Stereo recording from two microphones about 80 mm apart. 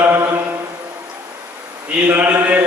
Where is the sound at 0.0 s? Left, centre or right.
Right.